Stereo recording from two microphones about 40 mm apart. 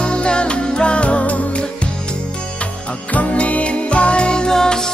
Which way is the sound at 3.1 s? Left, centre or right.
Left.